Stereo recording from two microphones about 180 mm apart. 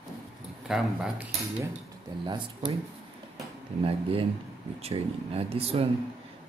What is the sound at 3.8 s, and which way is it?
Speech, 30° right (ahead or behind).